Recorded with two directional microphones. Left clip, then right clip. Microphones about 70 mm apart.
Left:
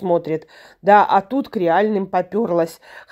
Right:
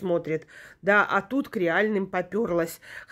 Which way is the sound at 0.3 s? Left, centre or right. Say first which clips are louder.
Left 6 dB; left.